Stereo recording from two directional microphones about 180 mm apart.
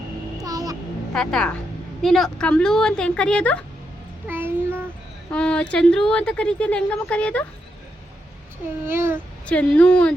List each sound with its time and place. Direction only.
0.4 s a sound: 20° right (ahead or behind)
1.1 s speech: 5° left (ahead or behind)
4.3 s child singing: 10° right (ahead or behind)
5.3 s a woman's voice: 5° left (ahead or behind)
8.8 s speech: 15° right (ahead or behind)
9.5 s a woman's voice: 5° left (ahead or behind)